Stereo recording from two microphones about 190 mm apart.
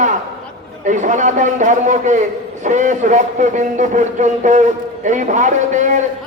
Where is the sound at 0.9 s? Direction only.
40° right (ahead or behind).